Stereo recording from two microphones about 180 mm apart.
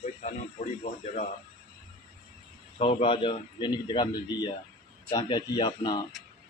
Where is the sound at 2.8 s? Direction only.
30° left (ahead or behind).